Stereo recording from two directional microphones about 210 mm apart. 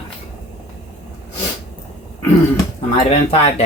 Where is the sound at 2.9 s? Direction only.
25° left (ahead or behind).